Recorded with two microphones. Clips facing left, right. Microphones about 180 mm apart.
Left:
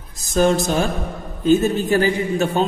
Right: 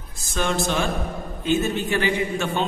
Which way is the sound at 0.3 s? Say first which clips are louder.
Left 7 dB; 40° left (ahead or behind).